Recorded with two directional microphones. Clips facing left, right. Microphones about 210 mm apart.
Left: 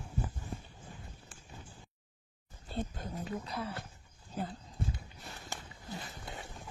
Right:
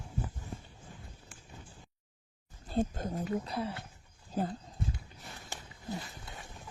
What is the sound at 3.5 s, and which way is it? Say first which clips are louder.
Speech: right 3 dB; 25° right (ahead or behind).